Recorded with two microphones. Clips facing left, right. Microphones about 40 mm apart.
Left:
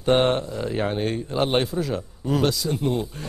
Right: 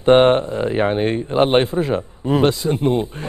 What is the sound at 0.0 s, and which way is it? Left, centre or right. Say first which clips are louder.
Speech: right 8 dB; right.